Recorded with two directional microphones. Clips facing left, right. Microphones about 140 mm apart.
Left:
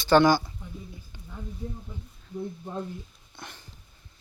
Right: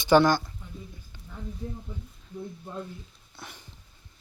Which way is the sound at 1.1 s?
15° left (ahead or behind).